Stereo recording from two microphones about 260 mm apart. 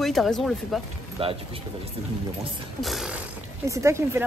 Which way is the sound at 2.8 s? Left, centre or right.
Centre.